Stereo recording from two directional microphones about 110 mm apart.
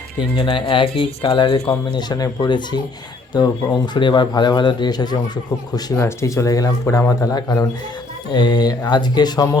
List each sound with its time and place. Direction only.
0.2 s speech: 50° left (ahead or behind)
6.0 s a man's voice: 25° left (ahead or behind)